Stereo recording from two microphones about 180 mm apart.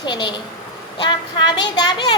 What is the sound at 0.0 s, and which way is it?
A woman's voice, 25° left (ahead or behind).